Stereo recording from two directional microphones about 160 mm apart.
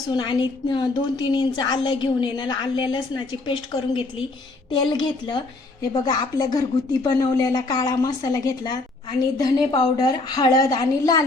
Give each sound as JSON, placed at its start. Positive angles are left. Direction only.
{"t": 0.1, "sound": "speech", "side_deg": 30}